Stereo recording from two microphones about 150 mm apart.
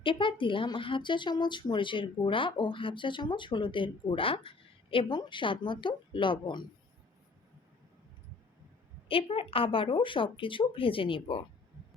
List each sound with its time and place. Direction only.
0.0 s speech: 35° left (ahead or behind)
9.0 s speech: 35° left (ahead or behind)